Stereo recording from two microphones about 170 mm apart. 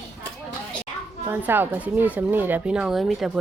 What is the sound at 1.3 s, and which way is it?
Speech, 10° right (ahead or behind).